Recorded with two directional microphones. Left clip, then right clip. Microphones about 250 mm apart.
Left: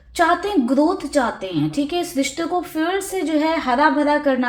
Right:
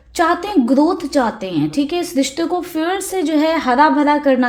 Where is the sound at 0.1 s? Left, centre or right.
Right.